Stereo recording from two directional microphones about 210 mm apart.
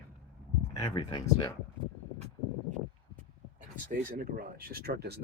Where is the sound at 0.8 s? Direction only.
15° left (ahead or behind).